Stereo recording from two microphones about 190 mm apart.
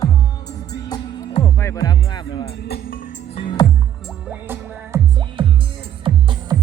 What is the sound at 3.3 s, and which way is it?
Music, 25° left (ahead or behind).